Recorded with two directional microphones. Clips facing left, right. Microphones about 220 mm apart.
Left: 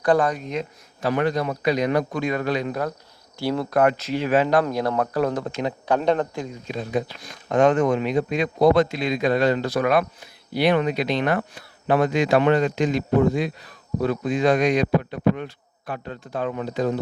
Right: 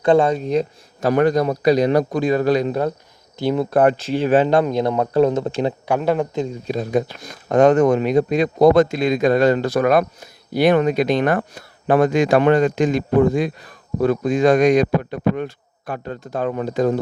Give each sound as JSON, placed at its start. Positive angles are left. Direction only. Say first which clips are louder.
{"t": 0.0, "sound": "a man's voice", "louder": "right 5 dB", "side_deg": -25}
{"t": 5.9, "sound": "speech", "louder": "even", "side_deg": -5}
{"t": 6.7, "sound": "speech", "louder": "right 4 dB", "side_deg": -45}